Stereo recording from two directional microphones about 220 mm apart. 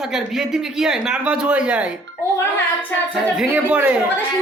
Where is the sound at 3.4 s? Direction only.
5° right (ahead or behind).